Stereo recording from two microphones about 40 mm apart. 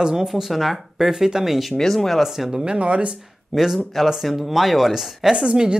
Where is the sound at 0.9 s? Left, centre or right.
Centre.